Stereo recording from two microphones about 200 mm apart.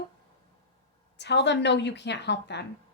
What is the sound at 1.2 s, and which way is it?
Speech, 60° left (ahead or behind).